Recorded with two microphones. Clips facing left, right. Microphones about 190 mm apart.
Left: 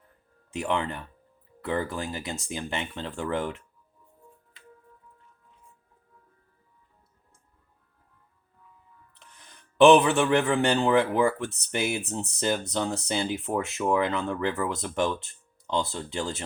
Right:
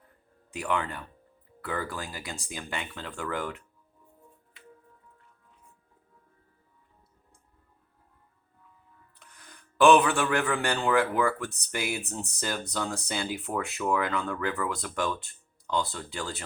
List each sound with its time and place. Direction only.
0.5 s speech: 25° left (ahead or behind)
9.1 s speech: 25° left (ahead or behind)